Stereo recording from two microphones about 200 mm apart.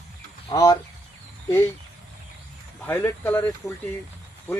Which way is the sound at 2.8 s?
10° left (ahead or behind).